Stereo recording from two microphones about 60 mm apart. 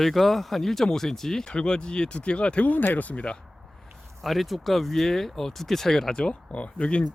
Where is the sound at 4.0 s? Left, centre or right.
Centre.